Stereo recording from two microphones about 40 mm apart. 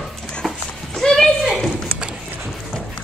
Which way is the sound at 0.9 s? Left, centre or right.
Centre.